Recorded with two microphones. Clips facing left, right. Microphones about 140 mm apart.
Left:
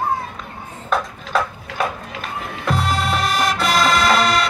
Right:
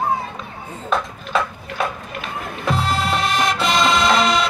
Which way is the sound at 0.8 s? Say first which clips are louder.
Even; centre (ahead or behind).